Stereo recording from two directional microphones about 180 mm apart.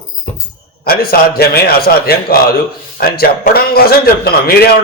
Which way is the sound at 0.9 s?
60° left (ahead or behind).